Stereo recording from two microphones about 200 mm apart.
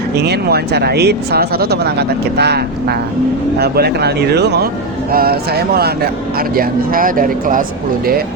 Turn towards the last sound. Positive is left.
turn(degrees=-45)  # may be behind; listen again after turning